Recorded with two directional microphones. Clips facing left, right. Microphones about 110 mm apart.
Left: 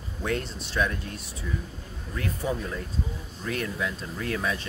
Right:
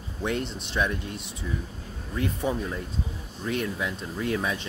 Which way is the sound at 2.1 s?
20° right (ahead or behind).